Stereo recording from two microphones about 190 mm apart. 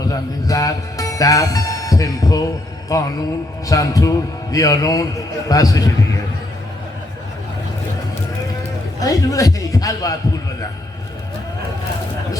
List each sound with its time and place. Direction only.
0.1 s speech: 15° left (ahead or behind)
2.9 s music: 20° left (ahead or behind)
9.0 s a man's voice: 20° left (ahead or behind)